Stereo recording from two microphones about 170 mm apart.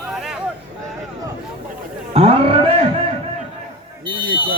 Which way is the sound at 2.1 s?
35° right (ahead or behind).